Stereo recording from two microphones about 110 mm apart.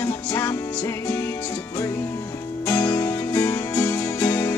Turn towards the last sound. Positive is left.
turn(degrees=20)  # may be behind; listen again after turning